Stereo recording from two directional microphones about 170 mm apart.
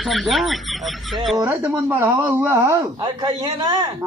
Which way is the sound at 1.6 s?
10° right (ahead or behind).